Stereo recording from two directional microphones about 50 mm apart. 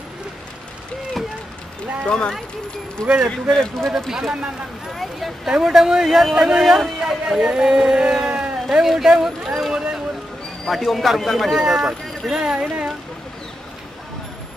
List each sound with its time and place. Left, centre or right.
2.0 s speech: centre
4.1 s a man's voice: centre
10.7 s a man's voice: centre
11.6 s speech: centre
12.5 s speech: right